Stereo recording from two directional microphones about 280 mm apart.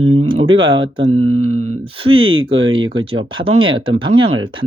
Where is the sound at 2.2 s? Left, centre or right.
Right.